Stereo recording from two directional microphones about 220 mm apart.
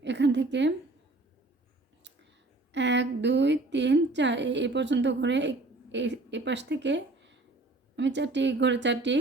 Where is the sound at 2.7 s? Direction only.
55° right (ahead or behind).